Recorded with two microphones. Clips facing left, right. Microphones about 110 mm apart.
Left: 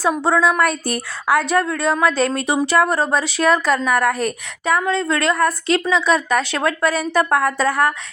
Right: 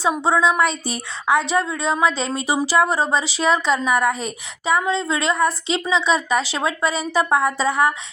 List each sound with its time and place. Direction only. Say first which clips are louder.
0.0 s speech: left 1 dB; centre (ahead or behind)
0.7 s speech: left 4 dB; 60° left (ahead or behind)
1.3 s speech: left 2 dB; centre (ahead or behind)